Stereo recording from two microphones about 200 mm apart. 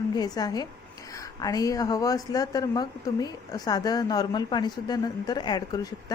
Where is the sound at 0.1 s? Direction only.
20° left (ahead or behind).